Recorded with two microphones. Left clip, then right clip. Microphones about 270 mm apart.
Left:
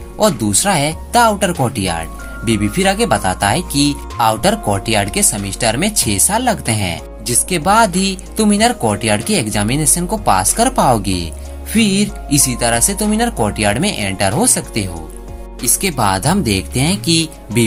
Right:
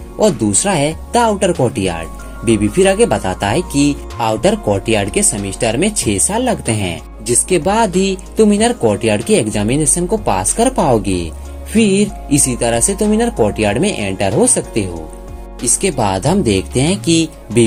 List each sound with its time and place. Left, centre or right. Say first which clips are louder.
0.2 s speech: right 1 dB; left